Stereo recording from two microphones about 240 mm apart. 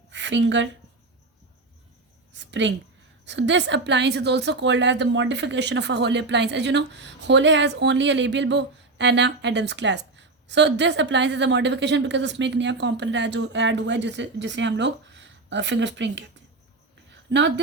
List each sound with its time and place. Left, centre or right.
0.1 s a woman's voice: right
2.3 s a woman's voice: right
17.1 s a sound: right